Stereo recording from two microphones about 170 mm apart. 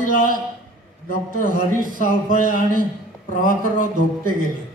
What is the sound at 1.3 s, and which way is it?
Speech, 50° right (ahead or behind).